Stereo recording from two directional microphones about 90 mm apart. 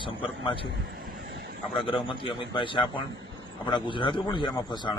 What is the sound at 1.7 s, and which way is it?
A man's voice, 70° left (ahead or behind).